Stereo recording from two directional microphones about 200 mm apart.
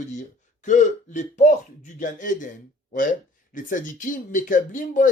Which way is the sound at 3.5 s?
40° left (ahead or behind).